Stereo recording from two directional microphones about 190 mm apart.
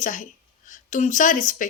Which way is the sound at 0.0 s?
45° left (ahead or behind).